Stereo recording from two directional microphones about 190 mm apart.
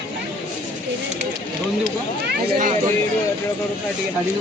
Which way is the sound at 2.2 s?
50° right (ahead or behind).